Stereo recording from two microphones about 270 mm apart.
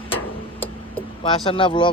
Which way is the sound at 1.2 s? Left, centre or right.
Centre.